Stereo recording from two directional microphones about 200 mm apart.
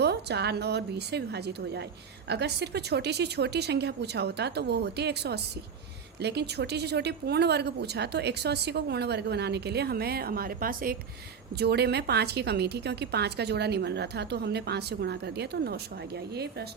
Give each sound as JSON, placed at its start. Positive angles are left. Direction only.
{"t": 0.0, "sound": "a woman's voice", "side_deg": -55}